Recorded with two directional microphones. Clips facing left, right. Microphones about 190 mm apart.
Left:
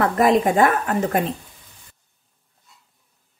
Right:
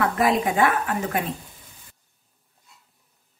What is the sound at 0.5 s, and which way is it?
Speech, 40° left (ahead or behind).